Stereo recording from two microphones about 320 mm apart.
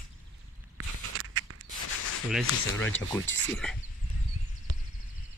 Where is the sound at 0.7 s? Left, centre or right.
Right.